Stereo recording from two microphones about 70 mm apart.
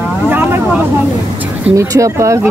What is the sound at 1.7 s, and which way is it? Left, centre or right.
Speech, right.